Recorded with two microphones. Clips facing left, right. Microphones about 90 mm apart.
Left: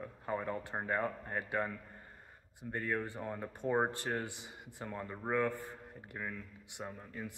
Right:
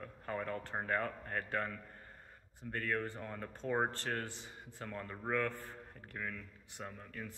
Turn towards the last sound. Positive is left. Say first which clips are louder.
# left 2 dB
turn(degrees=15)  # may be behind; listen again after turning